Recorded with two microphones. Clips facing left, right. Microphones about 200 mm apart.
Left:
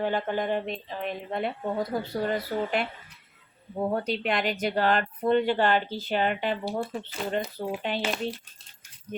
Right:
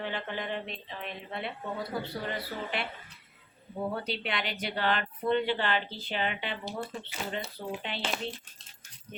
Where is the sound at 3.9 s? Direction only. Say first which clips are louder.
Left 7 dB; 45° left (ahead or behind).